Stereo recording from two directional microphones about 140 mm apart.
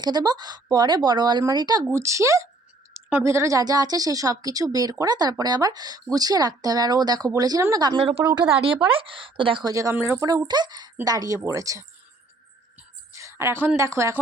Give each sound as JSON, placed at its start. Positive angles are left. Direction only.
{"t": 0.0, "sound": "a woman's voice", "side_deg": -30}
{"t": 8.2, "sound": "a woman's voice", "side_deg": -25}
{"t": 8.6, "sound": "speech", "side_deg": -40}
{"t": 9.7, "sound": "a woman's voice", "side_deg": -20}
{"t": 10.2, "sound": "a woman's voice", "side_deg": -30}
{"t": 13.1, "sound": "a woman's voice", "side_deg": -20}